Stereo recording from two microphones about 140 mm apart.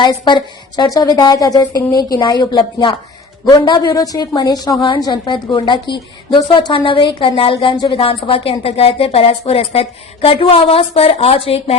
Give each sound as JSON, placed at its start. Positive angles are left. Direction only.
{"t": 0.0, "sound": "a woman's voice", "side_deg": 35}